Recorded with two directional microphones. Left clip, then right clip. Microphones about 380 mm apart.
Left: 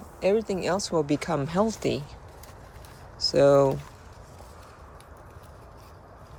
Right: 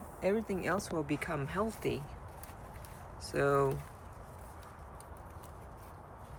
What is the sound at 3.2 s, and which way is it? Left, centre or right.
Speech, centre.